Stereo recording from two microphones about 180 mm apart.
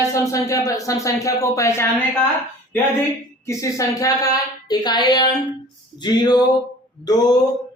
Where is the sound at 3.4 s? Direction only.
15° left (ahead or behind).